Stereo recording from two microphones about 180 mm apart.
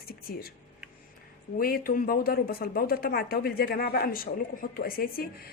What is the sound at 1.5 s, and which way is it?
Speech, 55° left (ahead or behind).